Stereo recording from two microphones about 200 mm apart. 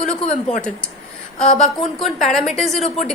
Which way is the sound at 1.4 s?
35° left (ahead or behind).